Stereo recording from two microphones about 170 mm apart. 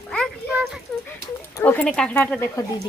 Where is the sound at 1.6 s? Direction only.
10° left (ahead or behind).